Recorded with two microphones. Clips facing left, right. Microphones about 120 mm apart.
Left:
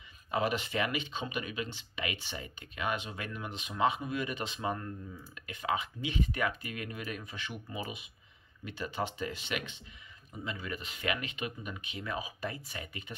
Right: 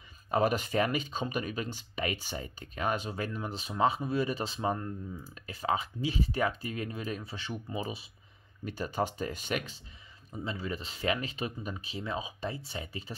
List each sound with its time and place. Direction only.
0.3 s speech: 45° right (ahead or behind)
10.4 s speech: 30° right (ahead or behind)